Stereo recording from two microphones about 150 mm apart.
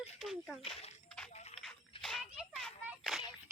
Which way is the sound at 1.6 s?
Centre (ahead or behind).